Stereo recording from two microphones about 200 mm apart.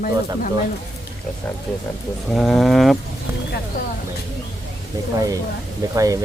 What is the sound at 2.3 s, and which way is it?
Speech, centre (ahead or behind).